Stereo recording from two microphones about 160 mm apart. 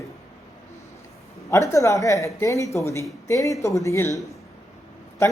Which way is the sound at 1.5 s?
20° left (ahead or behind).